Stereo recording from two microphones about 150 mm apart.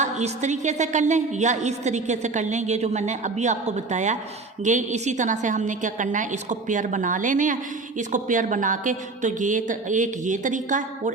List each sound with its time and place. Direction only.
0.0 s a woman's voice: 50° right (ahead or behind)